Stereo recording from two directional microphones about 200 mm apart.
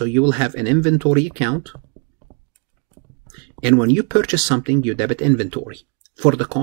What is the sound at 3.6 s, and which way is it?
Speech, 10° right (ahead or behind).